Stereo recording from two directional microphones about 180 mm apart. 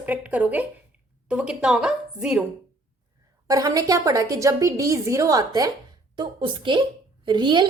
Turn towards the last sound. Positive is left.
turn(degrees=-25)  # may be behind; listen again after turning